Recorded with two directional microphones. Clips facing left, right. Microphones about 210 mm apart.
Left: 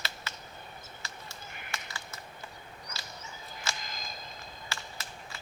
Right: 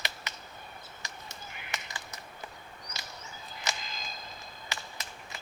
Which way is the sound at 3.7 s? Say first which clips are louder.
Right 2 dB; 20° right (ahead or behind).